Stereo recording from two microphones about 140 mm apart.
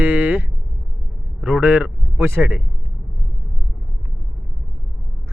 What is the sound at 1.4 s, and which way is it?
A man's voice, 10° right (ahead or behind).